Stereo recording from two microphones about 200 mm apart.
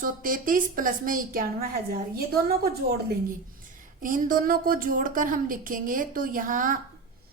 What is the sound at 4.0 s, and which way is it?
Speech, 45° right (ahead or behind).